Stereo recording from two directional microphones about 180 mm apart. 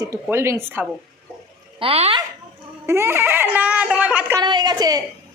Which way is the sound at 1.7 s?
35° right (ahead or behind).